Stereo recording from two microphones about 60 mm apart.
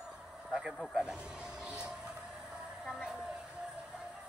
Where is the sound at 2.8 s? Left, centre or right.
Centre.